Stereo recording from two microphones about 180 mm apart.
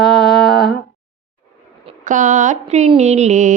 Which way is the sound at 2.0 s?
45° right (ahead or behind).